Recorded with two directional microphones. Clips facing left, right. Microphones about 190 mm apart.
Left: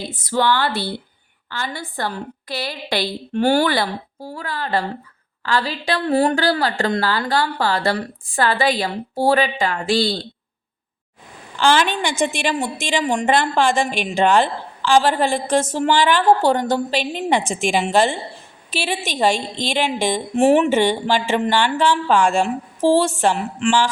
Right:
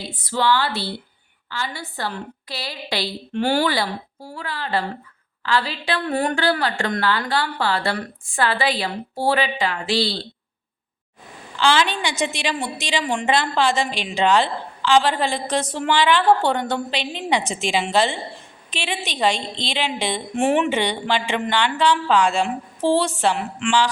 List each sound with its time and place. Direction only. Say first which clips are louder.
0.1 s a woman's voice: left 1 dB; 45° left (ahead or behind)
11.5 s a woman's voice: left 2 dB; 50° left (ahead or behind)